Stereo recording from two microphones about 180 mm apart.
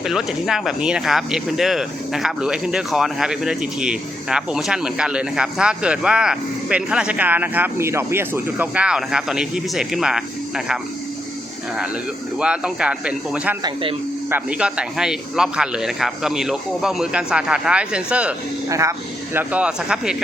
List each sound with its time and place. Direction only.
0.0 s speech: 5° right (ahead or behind)
12.4 s speech: 5° right (ahead or behind)
13.6 s speech: 25° right (ahead or behind)
14.3 s speech: 10° right (ahead or behind)
18.7 s speech: 15° right (ahead or behind)